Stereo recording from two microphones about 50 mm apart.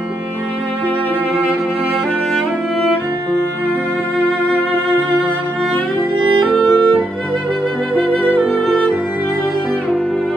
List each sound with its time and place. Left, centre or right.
6.5 s music: centre
8.5 s music: centre